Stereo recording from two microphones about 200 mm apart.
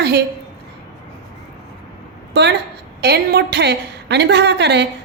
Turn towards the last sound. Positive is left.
turn(degrees=-60)  # may be behind; listen again after turning